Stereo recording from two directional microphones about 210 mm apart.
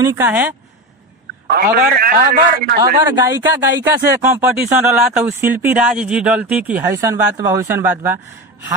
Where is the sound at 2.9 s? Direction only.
20° right (ahead or behind).